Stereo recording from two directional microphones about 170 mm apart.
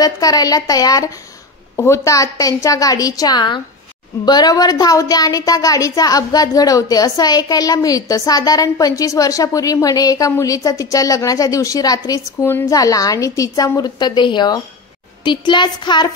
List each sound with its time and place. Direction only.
0.0 s speech: 20° left (ahead or behind)